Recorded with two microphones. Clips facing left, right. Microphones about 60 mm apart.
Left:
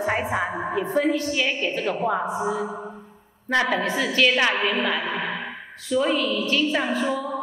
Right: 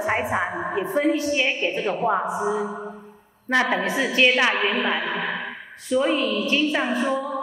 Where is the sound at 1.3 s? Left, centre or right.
Right.